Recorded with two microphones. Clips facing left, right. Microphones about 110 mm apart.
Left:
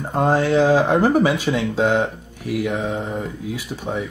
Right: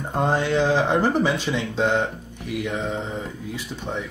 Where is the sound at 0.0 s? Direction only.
5° left (ahead or behind).